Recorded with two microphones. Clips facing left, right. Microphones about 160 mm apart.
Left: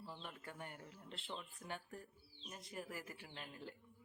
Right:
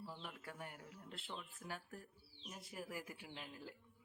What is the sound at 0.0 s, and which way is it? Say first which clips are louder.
A man's voice: even; 5° right (ahead or behind).